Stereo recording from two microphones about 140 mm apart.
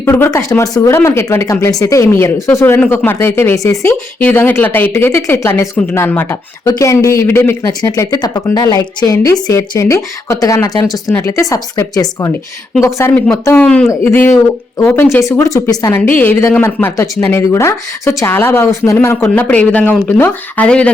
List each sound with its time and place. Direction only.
0.0 s speech: 20° left (ahead or behind)
4.2 s speech: 10° left (ahead or behind)
7.6 s speech: 30° left (ahead or behind)
13.6 s speech: 5° left (ahead or behind)